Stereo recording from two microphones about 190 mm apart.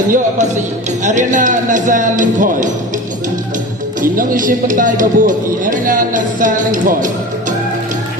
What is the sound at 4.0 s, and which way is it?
Speech, 45° right (ahead or behind).